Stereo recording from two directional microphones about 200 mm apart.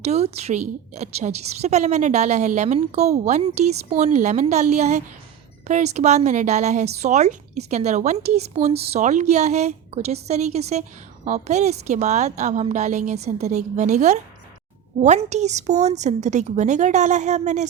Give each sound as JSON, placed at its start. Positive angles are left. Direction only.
{"t": 0.0, "sound": "a woman's voice", "side_deg": -30}